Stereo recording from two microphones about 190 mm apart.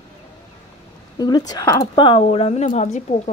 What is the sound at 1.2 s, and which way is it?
A woman's voice, 20° left (ahead or behind).